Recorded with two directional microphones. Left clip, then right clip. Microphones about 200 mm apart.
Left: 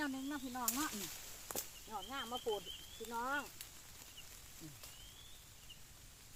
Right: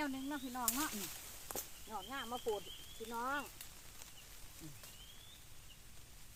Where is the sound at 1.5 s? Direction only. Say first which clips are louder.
Left 1 dB; 10° left (ahead or behind).